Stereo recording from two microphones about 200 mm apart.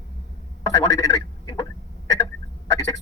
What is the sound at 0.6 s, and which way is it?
Telephone, 15° left (ahead or behind).